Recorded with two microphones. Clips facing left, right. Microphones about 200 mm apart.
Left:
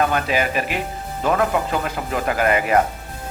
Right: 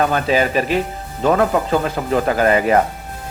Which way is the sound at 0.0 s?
35° right (ahead or behind).